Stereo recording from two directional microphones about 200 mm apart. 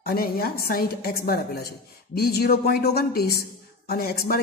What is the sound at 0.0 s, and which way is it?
Speech, 50° left (ahead or behind).